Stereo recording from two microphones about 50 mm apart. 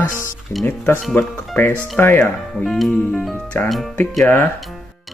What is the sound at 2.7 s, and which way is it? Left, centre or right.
Speech, centre.